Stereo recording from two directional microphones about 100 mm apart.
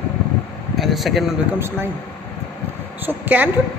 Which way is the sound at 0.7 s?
Centre (ahead or behind).